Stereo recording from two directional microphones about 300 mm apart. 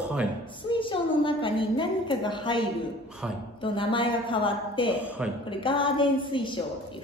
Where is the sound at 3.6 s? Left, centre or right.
Centre.